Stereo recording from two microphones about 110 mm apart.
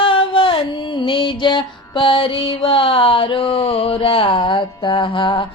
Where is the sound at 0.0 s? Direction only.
50° left (ahead or behind).